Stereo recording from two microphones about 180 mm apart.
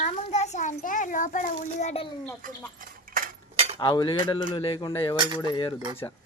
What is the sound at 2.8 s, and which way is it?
Keys jangling, 50° right (ahead or behind).